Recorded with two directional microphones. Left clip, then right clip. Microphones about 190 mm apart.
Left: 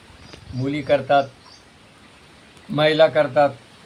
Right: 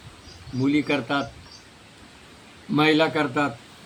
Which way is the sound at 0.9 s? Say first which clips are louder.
Left 8 dB; 15° left (ahead or behind).